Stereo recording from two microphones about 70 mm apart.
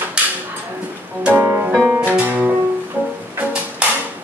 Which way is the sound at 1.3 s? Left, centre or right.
Right.